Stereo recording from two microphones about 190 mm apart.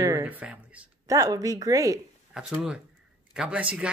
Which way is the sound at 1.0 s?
20° right (ahead or behind).